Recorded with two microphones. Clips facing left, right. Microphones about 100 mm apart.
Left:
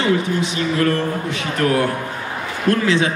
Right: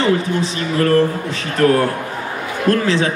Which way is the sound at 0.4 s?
40° right (ahead or behind).